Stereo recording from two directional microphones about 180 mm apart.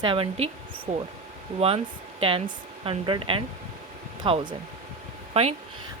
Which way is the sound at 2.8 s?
30° right (ahead or behind).